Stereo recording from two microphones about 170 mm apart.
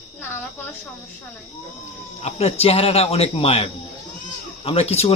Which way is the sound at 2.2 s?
35° left (ahead or behind).